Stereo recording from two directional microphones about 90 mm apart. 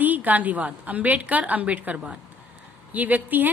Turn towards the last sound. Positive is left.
turn(degrees=-20)  # may be behind; listen again after turning